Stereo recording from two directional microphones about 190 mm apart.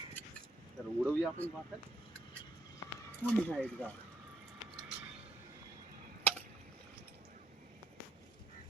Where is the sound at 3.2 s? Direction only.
5° left (ahead or behind).